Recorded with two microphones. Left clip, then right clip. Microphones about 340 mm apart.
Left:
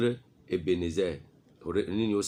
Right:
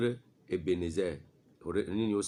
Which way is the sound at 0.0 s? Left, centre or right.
Right.